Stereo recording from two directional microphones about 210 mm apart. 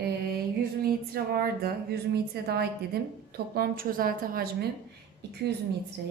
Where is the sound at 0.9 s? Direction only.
45° right (ahead or behind).